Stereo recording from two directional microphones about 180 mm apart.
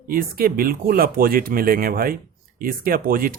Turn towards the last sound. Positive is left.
turn(degrees=-50)  # may be behind; listen again after turning